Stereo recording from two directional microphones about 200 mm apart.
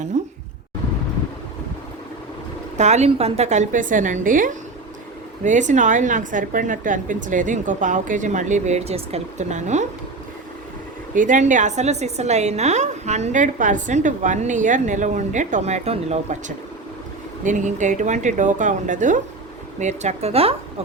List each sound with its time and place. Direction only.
0.1 s a woman's voice: 35° right (ahead or behind)
2.7 s a woman's voice: 35° right (ahead or behind)
11.1 s a woman's voice: 40° right (ahead or behind)
17.4 s a woman's voice: 40° right (ahead or behind)